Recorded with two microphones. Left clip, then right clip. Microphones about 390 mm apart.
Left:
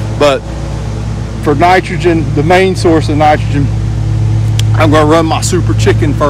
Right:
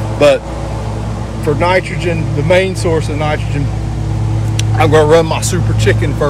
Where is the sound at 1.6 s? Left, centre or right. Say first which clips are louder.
Left 6 dB; centre.